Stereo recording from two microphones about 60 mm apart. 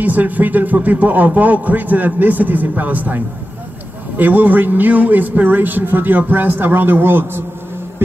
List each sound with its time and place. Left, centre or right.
0.0 s a man's voice: right